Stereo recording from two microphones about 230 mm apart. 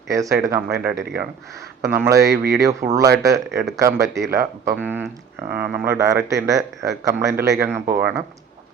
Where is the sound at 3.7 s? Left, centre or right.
Centre.